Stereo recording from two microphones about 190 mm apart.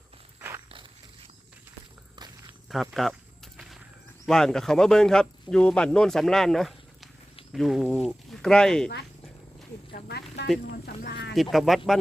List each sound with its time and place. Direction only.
2.6 s walk: centre (ahead or behind)
4.3 s speech: 5° left (ahead or behind)
9.9 s a sound: 60° left (ahead or behind)
11.5 s speech: centre (ahead or behind)